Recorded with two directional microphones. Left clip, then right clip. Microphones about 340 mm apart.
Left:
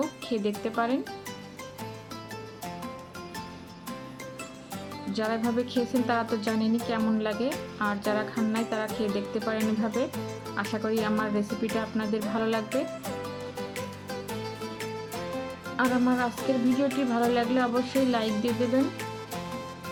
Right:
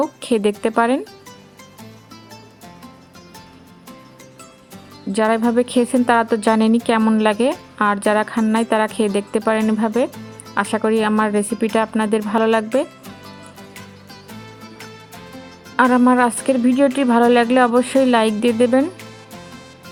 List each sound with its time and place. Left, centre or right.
0.2 s a woman's voice: right
5.1 s a woman's voice: right
15.7 s a woman's voice: right